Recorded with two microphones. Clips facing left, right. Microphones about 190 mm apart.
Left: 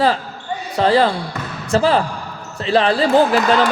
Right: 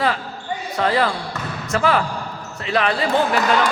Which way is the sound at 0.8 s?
30° left (ahead or behind).